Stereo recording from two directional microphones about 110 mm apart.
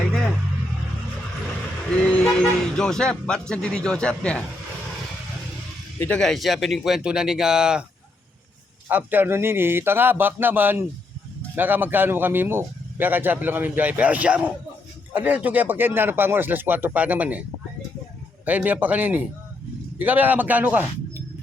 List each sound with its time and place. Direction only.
0.1 s vehicle: 5° left (ahead or behind)
2.2 s speech: 5° left (ahead or behind)
6.1 s speech: 5° left (ahead or behind)
8.9 s a man's voice: 15° right (ahead or behind)
18.4 s speech: 15° right (ahead or behind)